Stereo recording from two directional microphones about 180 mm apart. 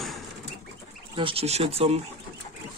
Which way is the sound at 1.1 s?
30° right (ahead or behind).